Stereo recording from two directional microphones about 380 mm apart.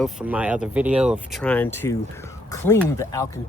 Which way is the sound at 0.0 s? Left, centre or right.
Centre.